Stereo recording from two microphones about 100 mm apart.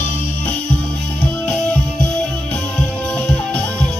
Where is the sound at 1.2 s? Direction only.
10° left (ahead or behind).